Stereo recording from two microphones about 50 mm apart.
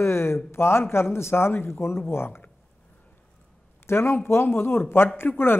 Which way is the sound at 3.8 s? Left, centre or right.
Left.